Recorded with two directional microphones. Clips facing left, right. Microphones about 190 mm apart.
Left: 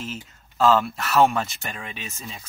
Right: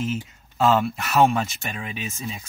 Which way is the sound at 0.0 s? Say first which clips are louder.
Right 7 dB; 5° right (ahead or behind).